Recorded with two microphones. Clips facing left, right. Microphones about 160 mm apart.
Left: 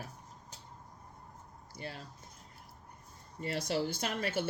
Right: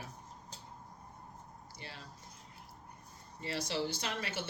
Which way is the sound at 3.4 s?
50° left (ahead or behind).